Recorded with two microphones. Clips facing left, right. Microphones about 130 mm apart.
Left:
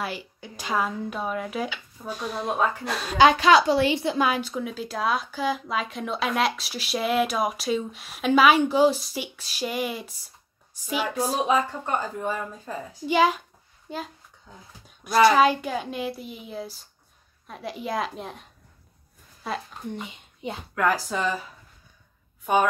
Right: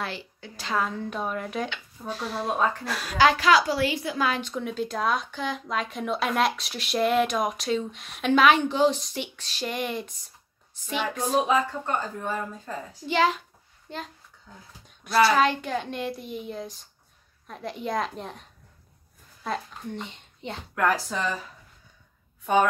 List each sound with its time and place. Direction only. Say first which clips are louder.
0.0 s speech: left 2 dB; 10° left (ahead or behind)
4.3 s speech: left 2 dB; 5° left (ahead or behind)
15.0 s speech: left 3 dB; 15° left (ahead or behind)
19.4 s speech: even; 5° left (ahead or behind)